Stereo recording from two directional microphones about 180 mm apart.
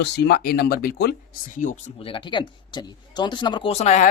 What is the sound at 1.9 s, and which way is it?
A woman's voice, 30° left (ahead or behind).